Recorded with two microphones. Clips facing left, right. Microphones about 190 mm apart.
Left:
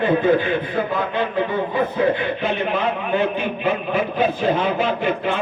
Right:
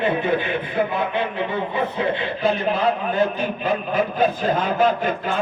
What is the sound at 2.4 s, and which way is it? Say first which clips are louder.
A man's voice: right 1 dB; 35° right (ahead or behind).